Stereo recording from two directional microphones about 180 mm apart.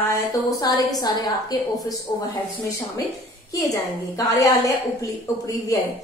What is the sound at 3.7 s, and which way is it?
A woman's voice, 20° left (ahead or behind).